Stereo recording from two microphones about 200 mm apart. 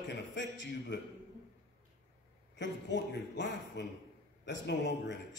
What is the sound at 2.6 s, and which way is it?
Speech, 65° left (ahead or behind).